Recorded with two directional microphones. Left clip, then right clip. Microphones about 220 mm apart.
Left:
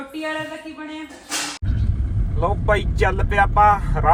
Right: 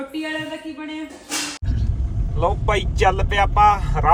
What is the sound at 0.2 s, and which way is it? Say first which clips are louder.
Speech: left 2 dB; centre (ahead or behind).